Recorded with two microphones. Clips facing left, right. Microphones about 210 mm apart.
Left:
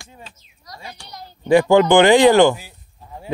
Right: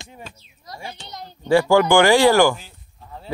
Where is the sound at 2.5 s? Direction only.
10° left (ahead or behind).